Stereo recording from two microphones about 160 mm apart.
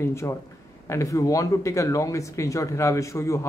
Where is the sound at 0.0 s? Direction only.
15° left (ahead or behind).